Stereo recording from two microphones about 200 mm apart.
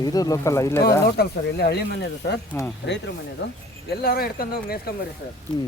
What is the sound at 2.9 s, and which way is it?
Speech, 60° left (ahead or behind).